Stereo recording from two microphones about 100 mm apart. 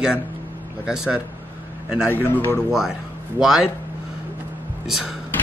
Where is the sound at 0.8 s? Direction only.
5° right (ahead or behind).